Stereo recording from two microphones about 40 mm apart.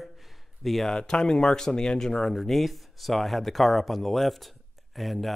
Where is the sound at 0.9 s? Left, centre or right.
Centre.